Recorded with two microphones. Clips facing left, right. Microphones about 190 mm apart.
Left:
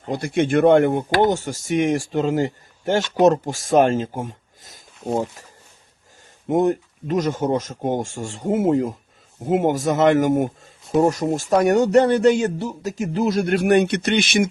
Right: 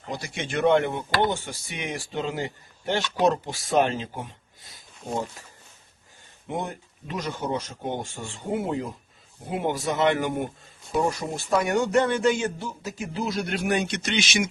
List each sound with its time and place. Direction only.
0.1 s speech: 55° left (ahead or behind)
6.5 s speech: 45° left (ahead or behind)